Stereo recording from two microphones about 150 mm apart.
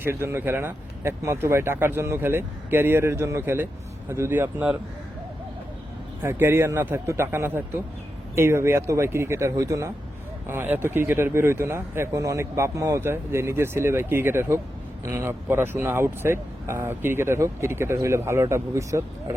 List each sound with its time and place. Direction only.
0.0 s speech: 15° right (ahead or behind)
6.2 s speech: 15° right (ahead or behind)